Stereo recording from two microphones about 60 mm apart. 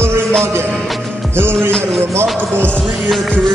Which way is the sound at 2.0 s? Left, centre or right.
Right.